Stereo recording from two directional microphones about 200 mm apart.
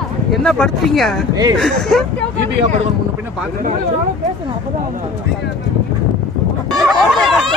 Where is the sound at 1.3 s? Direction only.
20° right (ahead or behind).